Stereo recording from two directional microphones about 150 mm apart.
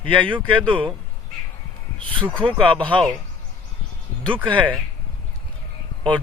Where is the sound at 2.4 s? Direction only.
35° right (ahead or behind).